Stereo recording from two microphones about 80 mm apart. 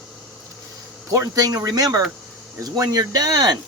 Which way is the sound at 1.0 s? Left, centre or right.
Right.